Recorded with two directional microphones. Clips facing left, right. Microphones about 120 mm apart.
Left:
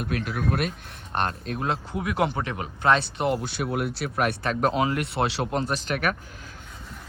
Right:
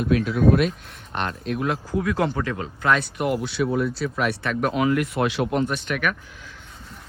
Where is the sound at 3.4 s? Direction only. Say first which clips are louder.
Right 5 dB; 50° left (ahead or behind).